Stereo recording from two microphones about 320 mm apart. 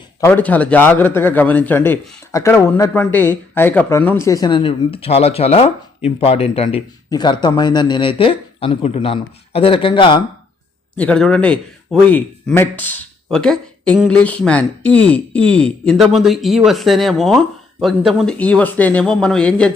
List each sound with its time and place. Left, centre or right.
0.2 s a man's voice: centre
10.9 s speech: centre